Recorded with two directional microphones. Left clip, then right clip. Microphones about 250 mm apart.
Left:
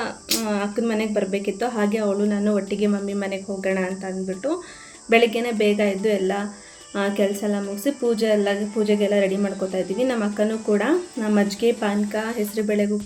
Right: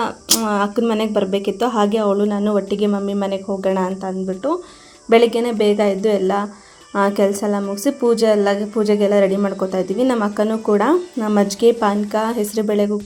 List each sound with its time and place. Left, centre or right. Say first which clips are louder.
0.0 s speech: right 6 dB; right
5.0 s speech: right 4 dB; right